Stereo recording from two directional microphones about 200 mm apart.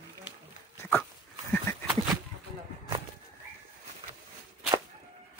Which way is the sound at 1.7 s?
15° left (ahead or behind).